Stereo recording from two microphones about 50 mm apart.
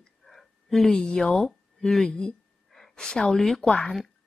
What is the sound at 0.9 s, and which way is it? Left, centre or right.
Speech, centre.